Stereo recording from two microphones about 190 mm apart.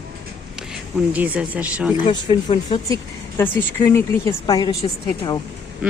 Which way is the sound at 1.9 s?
25° left (ahead or behind).